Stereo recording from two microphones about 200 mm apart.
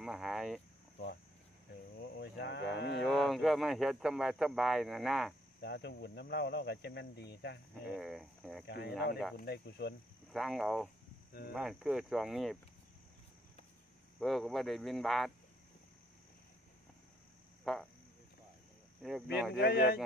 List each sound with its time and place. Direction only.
0.0 s speech: centre (ahead or behind)
0.9 s speech: 55° left (ahead or behind)
3.0 s speech: centre (ahead or behind)
5.6 s speech: 55° left (ahead or behind)
7.9 s speech: centre (ahead or behind)
8.6 s speech: 55° left (ahead or behind)
10.3 s speech: centre (ahead or behind)
14.2 s speech: centre (ahead or behind)
17.7 s speech: centre (ahead or behind)
19.0 s speech: centre (ahead or behind)
19.5 s speech: 50° left (ahead or behind)